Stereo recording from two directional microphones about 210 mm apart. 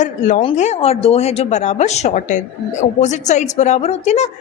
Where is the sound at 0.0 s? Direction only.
35° left (ahead or behind).